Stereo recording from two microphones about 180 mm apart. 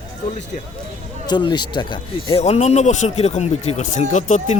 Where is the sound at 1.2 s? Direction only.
25° left (ahead or behind).